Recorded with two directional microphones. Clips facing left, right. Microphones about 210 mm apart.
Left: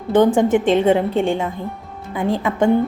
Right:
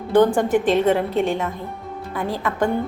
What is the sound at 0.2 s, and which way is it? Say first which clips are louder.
A woman's voice: left 2 dB; 25° left (ahead or behind).